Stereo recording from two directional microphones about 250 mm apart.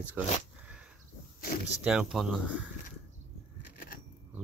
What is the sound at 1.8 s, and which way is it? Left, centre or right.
Speech, centre.